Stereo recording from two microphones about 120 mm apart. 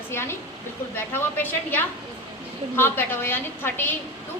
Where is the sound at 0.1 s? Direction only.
20° left (ahead or behind).